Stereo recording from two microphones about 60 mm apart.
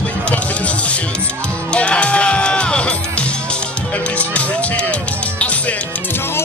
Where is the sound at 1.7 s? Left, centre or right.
Centre.